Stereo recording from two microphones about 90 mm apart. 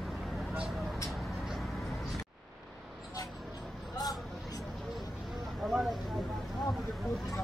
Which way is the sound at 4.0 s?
45° left (ahead or behind).